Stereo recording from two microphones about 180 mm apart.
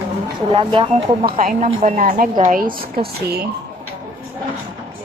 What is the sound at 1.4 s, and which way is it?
A woman's voice, 50° right (ahead or behind).